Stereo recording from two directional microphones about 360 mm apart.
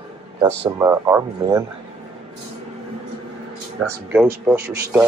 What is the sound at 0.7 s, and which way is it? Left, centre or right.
Speech, centre.